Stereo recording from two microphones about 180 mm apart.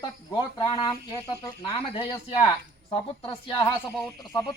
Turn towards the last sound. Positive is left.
turn(degrees=20)  # may be behind; listen again after turning